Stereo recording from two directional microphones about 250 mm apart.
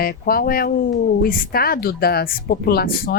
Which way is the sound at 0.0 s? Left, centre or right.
Left.